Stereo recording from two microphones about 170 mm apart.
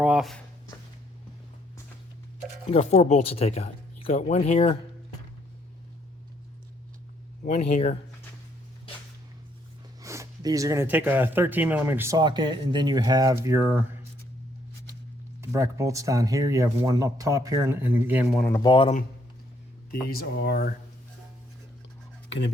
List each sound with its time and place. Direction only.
0.0 s speech: 5° right (ahead or behind)
2.6 s speech: 40° left (ahead or behind)
7.4 s speech: 40° left (ahead or behind)
10.0 s speech: 20° right (ahead or behind)
15.4 s speech: 15° right (ahead or behind)
18.6 s speech: 30° left (ahead or behind)
19.9 s speech: 65° left (ahead or behind)
22.3 s speech: 90° left